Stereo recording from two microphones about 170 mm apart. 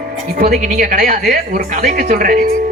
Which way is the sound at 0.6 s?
50° right (ahead or behind).